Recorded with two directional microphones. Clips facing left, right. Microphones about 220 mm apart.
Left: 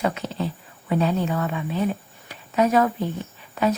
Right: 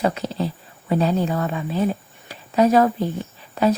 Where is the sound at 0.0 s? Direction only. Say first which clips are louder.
Right 3 dB; 35° right (ahead or behind).